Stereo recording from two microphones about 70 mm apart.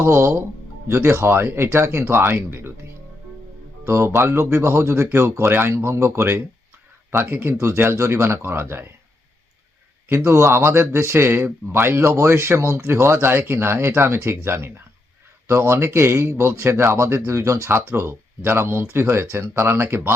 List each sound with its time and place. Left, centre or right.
0.0 s speech: right
3.8 s speech: right
7.5 s speech: right
10.2 s speech: right